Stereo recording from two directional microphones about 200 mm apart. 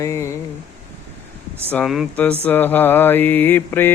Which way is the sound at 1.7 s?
Centre (ahead or behind).